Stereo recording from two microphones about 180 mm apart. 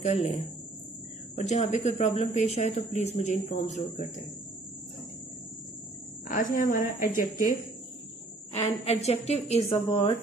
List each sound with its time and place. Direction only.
0.0 s speech: 40° left (ahead or behind)
6.2 s a woman's voice: 45° left (ahead or behind)
8.5 s speech: 35° left (ahead or behind)